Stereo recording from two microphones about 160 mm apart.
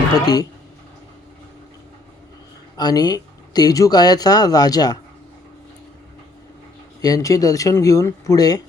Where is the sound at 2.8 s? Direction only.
25° left (ahead or behind).